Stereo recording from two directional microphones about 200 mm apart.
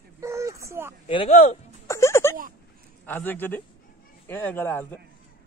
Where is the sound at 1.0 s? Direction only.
30° left (ahead or behind).